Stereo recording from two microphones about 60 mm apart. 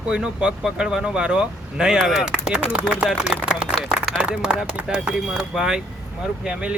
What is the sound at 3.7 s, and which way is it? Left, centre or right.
Speech, centre.